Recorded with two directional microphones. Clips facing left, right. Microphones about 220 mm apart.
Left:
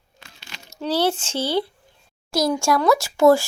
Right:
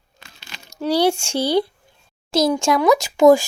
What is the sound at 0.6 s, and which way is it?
Speech, 15° right (ahead or behind).